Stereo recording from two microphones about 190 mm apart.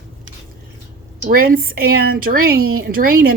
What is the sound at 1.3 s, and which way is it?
A woman's voice, 50° right (ahead or behind).